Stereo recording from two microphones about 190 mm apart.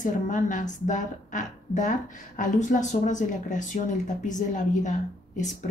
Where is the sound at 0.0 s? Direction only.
40° left (ahead or behind).